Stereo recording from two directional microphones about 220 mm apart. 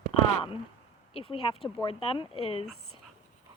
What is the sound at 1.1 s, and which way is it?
Speech, 25° left (ahead or behind).